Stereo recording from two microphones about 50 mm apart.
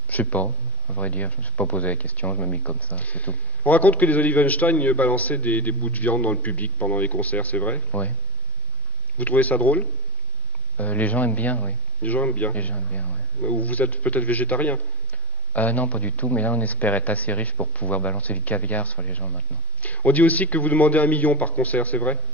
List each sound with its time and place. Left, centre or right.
0.1 s a man's voice: left
2.2 s speech: left
2.5 s a man's voice: left
9.2 s a man's voice: left